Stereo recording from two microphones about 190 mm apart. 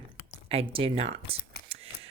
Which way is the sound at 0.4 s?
30° right (ahead or behind).